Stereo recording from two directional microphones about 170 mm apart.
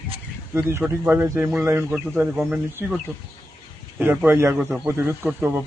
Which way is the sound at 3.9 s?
10° right (ahead or behind).